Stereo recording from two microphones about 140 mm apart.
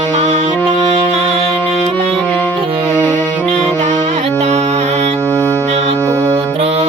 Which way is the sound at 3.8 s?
50° right (ahead or behind).